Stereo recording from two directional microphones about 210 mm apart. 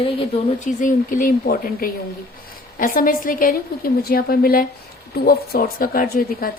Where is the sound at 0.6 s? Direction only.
40° left (ahead or behind).